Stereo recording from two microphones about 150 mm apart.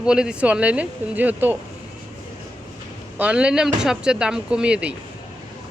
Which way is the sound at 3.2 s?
10° right (ahead or behind).